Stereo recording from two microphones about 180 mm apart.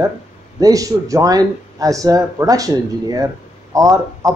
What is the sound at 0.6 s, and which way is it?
Speech, 20° right (ahead or behind).